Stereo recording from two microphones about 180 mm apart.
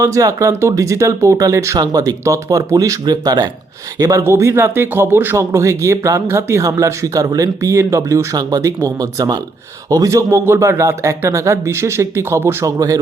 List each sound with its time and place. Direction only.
0.0 s speech: 20° right (ahead or behind)